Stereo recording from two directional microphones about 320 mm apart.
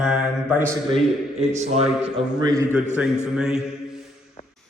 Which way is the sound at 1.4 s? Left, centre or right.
Centre.